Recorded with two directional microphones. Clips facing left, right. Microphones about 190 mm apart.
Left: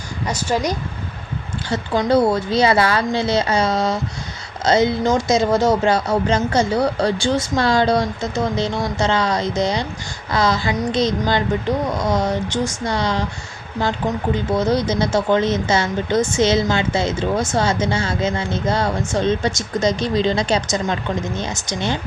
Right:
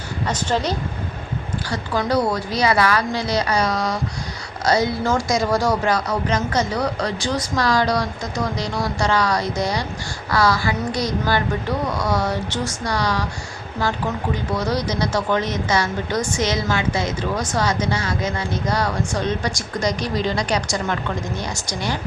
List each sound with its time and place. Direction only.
0.3 s speech: 10° left (ahead or behind)
1.7 s speech: 25° left (ahead or behind)
14.5 s speech: 25° left (ahead or behind)